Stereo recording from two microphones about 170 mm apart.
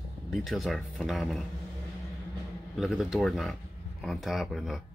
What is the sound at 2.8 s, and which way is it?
Speech, centre (ahead or behind).